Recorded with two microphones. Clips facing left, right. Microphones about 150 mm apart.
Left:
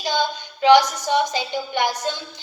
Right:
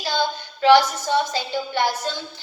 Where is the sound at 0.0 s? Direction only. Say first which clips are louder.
Left 1 dB; 15° left (ahead or behind).